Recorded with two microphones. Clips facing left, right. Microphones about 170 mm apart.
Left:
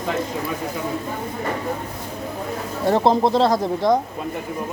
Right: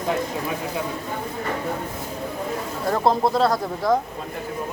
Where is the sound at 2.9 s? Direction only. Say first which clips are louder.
Left 3 dB; 25° left (ahead or behind).